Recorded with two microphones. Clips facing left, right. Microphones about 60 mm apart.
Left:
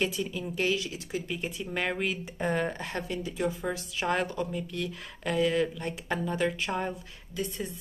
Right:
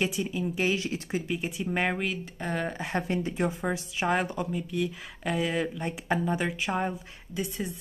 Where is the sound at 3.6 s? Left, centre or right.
Centre.